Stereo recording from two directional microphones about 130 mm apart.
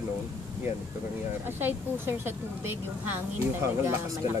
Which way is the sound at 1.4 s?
15° right (ahead or behind).